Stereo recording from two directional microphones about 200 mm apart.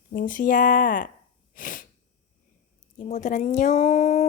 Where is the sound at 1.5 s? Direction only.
45° left (ahead or behind).